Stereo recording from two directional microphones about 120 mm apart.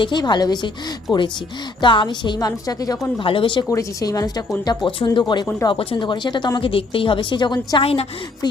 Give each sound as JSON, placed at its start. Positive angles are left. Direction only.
{"t": 0.0, "sound": "speech", "side_deg": 40}
{"t": 3.2, "sound": "speech", "side_deg": 45}
{"t": 3.7, "sound": "speech", "side_deg": 25}
{"t": 5.6, "sound": "speech", "side_deg": 45}
{"t": 7.8, "sound": "a woman's voice", "side_deg": 55}